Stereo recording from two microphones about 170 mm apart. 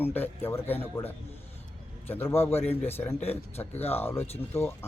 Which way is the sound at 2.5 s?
40° left (ahead or behind).